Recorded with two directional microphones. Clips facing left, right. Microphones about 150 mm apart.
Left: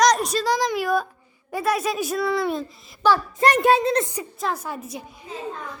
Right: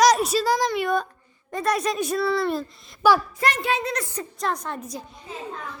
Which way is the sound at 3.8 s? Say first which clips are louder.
Left 7 dB; 25° left (ahead or behind).